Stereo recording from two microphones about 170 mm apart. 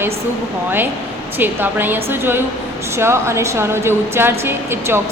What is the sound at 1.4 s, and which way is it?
A woman's voice, 10° right (ahead or behind).